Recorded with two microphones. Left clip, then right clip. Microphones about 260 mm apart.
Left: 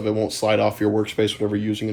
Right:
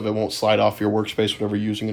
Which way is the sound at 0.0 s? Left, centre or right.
Right.